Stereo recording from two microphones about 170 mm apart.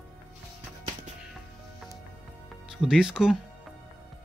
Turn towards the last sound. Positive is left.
turn(degrees=-5)  # may be behind; listen again after turning